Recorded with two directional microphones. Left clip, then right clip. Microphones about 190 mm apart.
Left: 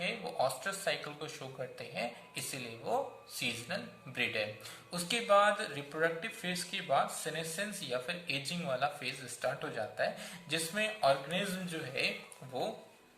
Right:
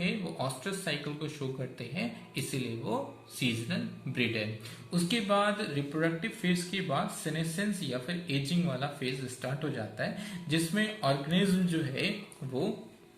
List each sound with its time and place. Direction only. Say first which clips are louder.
0.0 s speech: left 1 dB; 15° left (ahead or behind)